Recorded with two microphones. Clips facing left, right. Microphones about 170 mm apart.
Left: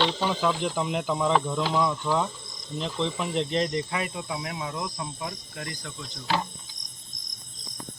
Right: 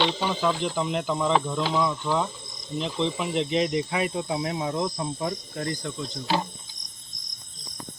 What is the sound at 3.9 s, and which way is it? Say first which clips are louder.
Cricket: right 5 dB; 25° right (ahead or behind).